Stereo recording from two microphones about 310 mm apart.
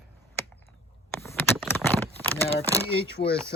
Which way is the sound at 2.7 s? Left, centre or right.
Centre.